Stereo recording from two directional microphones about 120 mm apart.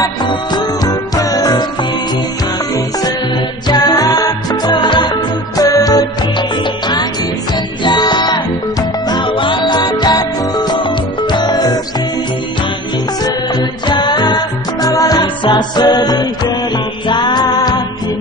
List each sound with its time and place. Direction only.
0.0 s music: 40° left (ahead or behind)
3.6 s music: 35° left (ahead or behind)
5.6 s music: 30° left (ahead or behind)
13.2 s music: 35° left (ahead or behind)